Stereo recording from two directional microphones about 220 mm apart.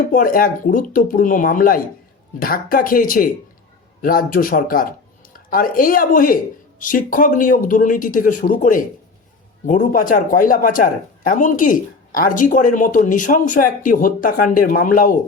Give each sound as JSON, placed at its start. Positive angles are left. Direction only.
{"t": 0.1, "sound": "speech", "side_deg": 40}